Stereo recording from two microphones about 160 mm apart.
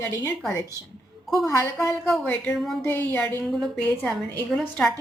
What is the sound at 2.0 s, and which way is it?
Speech, 5° left (ahead or behind).